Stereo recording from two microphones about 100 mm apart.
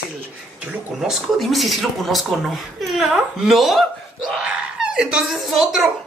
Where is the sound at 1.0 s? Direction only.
Centre (ahead or behind).